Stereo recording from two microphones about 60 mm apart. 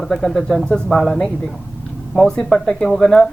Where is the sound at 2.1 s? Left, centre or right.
Centre.